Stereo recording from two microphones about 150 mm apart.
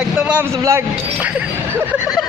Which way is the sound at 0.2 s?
10° right (ahead or behind).